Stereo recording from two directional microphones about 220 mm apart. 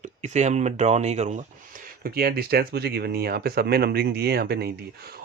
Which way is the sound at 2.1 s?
45° right (ahead or behind).